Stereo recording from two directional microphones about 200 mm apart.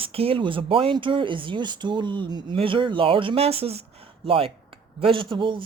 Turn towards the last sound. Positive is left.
turn(degrees=-25)  # may be behind; listen again after turning